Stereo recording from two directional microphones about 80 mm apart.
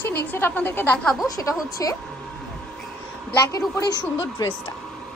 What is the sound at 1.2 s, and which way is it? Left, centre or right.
Speech, left.